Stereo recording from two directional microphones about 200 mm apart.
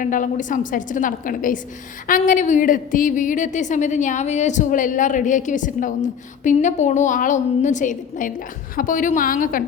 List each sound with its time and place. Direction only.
0.0 s a woman's voice: 40° left (ahead or behind)